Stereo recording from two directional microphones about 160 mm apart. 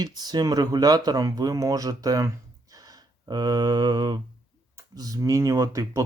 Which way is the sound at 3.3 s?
25° right (ahead or behind).